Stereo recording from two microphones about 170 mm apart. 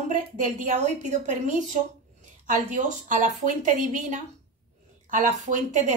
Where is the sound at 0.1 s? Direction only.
45° right (ahead or behind).